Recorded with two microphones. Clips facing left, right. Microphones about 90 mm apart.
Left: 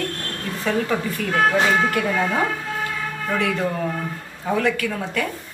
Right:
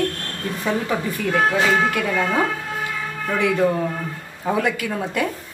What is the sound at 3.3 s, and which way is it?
Speech, 15° right (ahead or behind).